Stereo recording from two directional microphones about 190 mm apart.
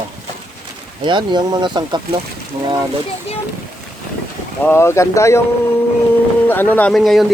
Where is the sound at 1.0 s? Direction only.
25° right (ahead or behind).